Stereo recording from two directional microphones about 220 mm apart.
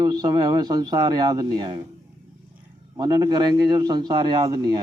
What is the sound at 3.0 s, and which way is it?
A man's voice, 15° right (ahead or behind).